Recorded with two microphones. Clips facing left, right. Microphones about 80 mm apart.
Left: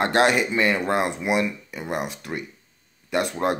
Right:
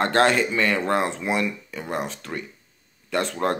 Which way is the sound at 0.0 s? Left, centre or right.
Centre.